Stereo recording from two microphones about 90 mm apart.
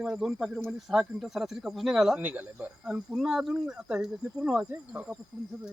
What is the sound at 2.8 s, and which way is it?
Speech, 5° right (ahead or behind).